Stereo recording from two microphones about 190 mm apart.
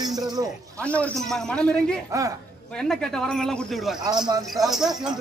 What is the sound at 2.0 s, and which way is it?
Speech, 15° right (ahead or behind).